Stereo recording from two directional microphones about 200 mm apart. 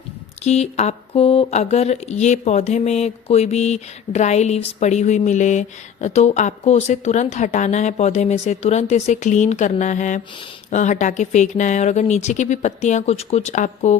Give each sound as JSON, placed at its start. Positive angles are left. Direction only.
{"t": 0.4, "sound": "speech", "side_deg": 35}